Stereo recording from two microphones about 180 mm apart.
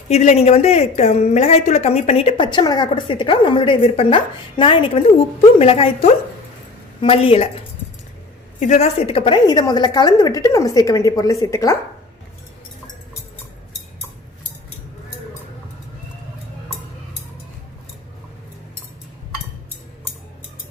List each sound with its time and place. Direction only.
0.1 s a woman's voice: 35° left (ahead or behind); by 11.8 s 15° left (ahead or behind)